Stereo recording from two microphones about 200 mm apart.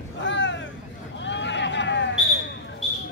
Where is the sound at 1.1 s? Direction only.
65° left (ahead or behind).